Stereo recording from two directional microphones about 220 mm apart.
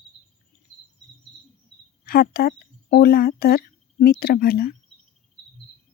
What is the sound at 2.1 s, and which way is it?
Speech, 45° left (ahead or behind).